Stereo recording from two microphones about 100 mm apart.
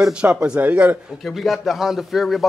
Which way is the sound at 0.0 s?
10° right (ahead or behind).